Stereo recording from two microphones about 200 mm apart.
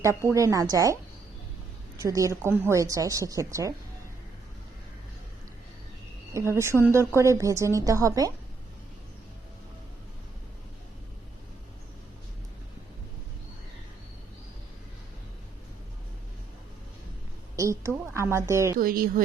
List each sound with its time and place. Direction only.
0.0 s a woman's voice: 15° right (ahead or behind)
2.0 s a woman's voice: 15° right (ahead or behind)
6.3 s a woman's voice: 15° right (ahead or behind)
17.6 s a woman's voice: 15° right (ahead or behind)
18.8 s speech: 45° right (ahead or behind)